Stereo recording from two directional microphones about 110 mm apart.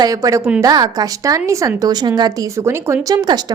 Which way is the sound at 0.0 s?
35° right (ahead or behind).